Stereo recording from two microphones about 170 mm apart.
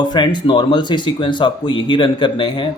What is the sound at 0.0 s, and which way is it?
Speech, 25° left (ahead or behind).